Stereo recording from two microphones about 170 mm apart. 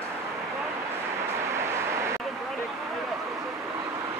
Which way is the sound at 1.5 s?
15° right (ahead or behind).